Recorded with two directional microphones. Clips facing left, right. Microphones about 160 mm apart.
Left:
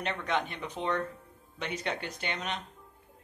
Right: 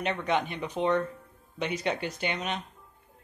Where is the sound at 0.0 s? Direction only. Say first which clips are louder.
Right 4 dB; 10° right (ahead or behind).